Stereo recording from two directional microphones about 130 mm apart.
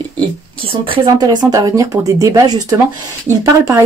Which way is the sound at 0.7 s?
45° right (ahead or behind).